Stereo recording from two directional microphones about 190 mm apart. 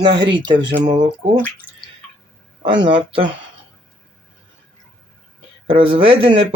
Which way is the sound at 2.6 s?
25° right (ahead or behind).